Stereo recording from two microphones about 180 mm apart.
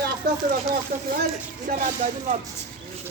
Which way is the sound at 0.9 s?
55° right (ahead or behind).